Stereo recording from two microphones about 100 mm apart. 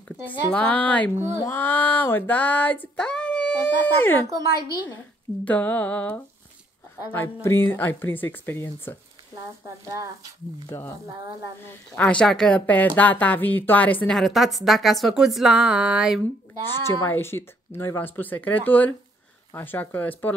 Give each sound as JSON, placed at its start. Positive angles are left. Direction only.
{"t": 0.3, "sound": "a woman's voice", "side_deg": 15}
{"t": 5.4, "sound": "a woman's voice", "side_deg": 15}
{"t": 7.4, "sound": "speech", "side_deg": 20}
{"t": 9.8, "sound": "speech", "side_deg": -35}
{"t": 11.9, "sound": "a woman's voice", "side_deg": 10}
{"t": 14.1, "sound": "a woman's voice", "side_deg": 0}
{"t": 16.6, "sound": "a woman's voice", "side_deg": 25}